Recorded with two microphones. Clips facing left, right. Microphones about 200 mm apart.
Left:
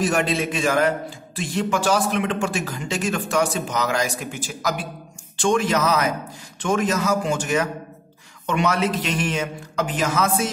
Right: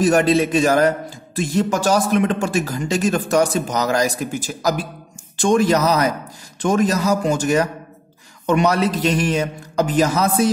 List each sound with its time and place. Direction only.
0.0 s a man's voice: 40° right (ahead or behind)